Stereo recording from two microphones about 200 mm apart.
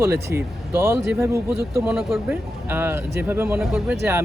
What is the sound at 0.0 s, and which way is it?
Speech, 10° right (ahead or behind).